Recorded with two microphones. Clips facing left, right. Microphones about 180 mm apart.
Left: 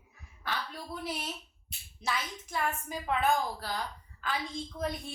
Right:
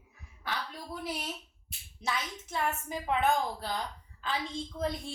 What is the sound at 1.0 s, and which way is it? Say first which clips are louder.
A woman's voice: right 1 dB; 15° right (ahead or behind).